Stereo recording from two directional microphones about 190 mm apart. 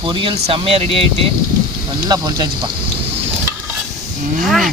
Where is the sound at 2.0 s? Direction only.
20° right (ahead or behind).